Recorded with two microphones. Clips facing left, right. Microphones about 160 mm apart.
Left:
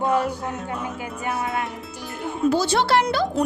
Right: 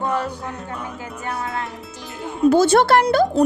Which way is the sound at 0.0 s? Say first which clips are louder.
Left 2 dB; 15° left (ahead or behind).